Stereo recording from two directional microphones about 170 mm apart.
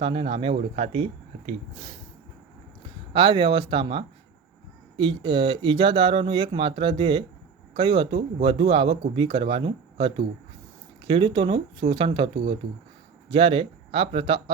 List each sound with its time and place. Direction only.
0.0 s speech: 30° right (ahead or behind)
3.1 s speech: 30° right (ahead or behind)